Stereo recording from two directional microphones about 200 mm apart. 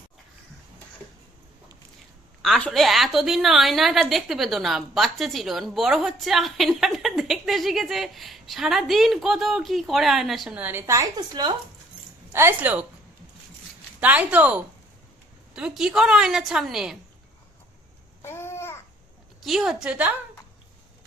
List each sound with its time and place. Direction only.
2.4 s a woman's voice: centre (ahead or behind)
14.0 s a woman's voice: 5° right (ahead or behind)
18.2 s babbling: 10° left (ahead or behind)
19.5 s a woman's voice: centre (ahead or behind)